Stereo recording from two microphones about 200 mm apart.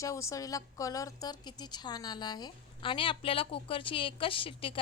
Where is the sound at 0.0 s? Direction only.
15° left (ahead or behind).